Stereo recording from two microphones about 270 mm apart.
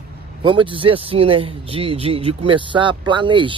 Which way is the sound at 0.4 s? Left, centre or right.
Centre.